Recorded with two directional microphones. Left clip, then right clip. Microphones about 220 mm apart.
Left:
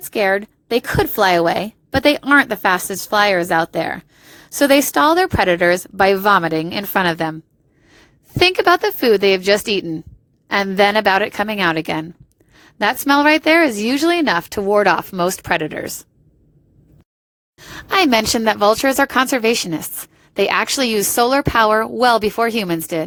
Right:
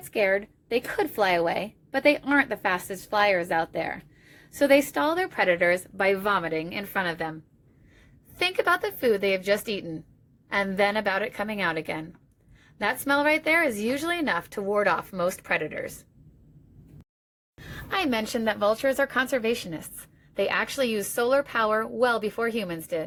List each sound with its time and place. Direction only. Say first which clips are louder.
0.1 s a woman's voice: left 7 dB; 50° left (ahead or behind)
17.8 s a woman's voice: left 13 dB; 50° left (ahead or behind)